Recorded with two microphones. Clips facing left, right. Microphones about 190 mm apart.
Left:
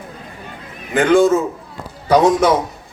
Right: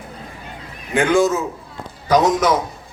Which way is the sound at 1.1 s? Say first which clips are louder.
Left 6 dB; 30° left (ahead or behind).